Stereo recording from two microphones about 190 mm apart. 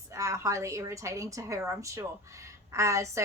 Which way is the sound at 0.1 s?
15° right (ahead or behind).